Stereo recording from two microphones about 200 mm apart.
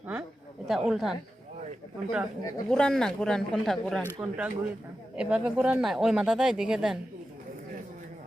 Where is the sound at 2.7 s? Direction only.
5° left (ahead or behind).